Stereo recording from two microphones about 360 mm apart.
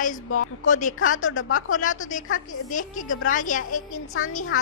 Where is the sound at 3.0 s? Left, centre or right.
Left.